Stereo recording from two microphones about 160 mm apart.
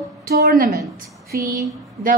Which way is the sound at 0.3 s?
70° right (ahead or behind).